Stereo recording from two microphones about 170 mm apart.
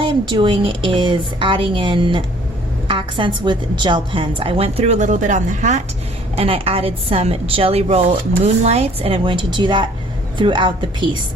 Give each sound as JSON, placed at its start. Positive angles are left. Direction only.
{"t": 0.0, "sound": "a woman's voice", "side_deg": -30}
{"t": 6.3, "sound": "a woman's voice", "side_deg": -35}